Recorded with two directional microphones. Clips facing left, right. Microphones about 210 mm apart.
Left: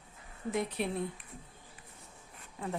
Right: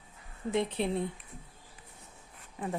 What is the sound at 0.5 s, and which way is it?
Speech, 25° right (ahead or behind).